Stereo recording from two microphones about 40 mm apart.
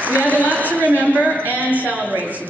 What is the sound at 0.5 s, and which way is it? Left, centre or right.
A woman's voice, right.